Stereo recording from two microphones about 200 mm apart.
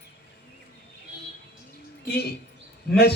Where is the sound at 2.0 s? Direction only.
50° left (ahead or behind).